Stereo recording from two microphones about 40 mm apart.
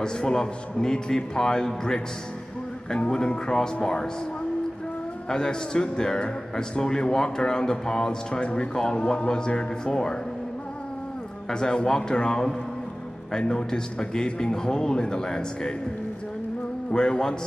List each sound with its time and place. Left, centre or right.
0.0 s a man's voice: centre
5.3 s a man's voice: centre
11.5 s a man's voice: centre
16.9 s a man's voice: centre